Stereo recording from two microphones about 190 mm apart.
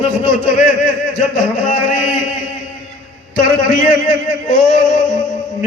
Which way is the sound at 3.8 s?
40° left (ahead or behind).